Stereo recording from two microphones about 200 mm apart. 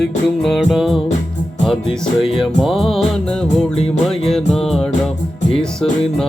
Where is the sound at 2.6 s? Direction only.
Centre (ahead or behind).